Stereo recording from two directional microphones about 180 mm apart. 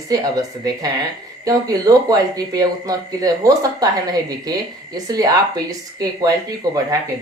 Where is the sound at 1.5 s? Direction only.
20° right (ahead or behind).